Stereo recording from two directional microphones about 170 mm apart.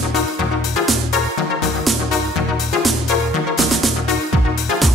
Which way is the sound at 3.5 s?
Centre (ahead or behind).